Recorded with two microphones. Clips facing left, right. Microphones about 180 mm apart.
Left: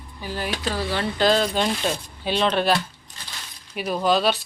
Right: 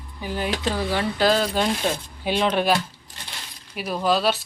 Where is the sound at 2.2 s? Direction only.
15° right (ahead or behind).